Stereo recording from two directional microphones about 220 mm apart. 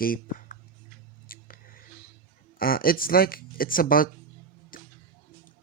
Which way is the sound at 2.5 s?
40° left (ahead or behind).